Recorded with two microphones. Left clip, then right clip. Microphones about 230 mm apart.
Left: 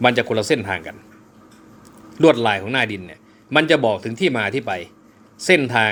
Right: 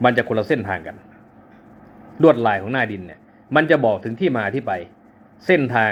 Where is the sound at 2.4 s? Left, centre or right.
Left.